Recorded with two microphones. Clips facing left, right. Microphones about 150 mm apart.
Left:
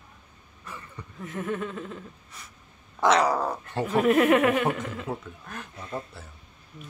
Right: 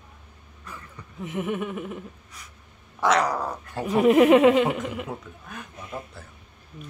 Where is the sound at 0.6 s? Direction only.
5° left (ahead or behind).